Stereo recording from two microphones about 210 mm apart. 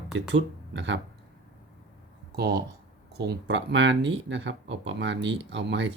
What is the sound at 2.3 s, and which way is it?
Speech, 50° right (ahead or behind).